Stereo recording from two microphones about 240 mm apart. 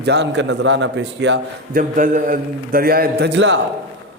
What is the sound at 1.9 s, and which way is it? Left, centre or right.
A man's voice, right.